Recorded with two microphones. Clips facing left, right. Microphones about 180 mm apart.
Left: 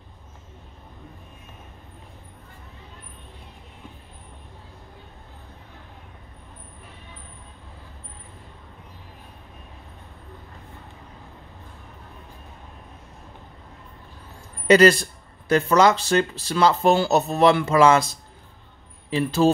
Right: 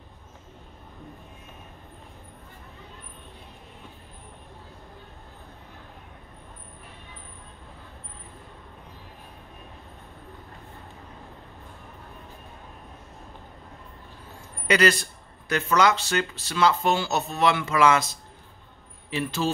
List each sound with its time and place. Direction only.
14.7 s speech: 30° left (ahead or behind)
19.0 s speech: 35° left (ahead or behind)